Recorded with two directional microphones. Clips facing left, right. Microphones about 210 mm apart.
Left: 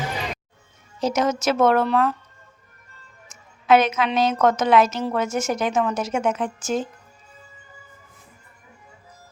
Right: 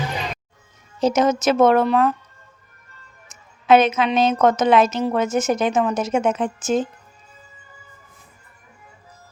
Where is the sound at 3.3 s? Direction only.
25° right (ahead or behind).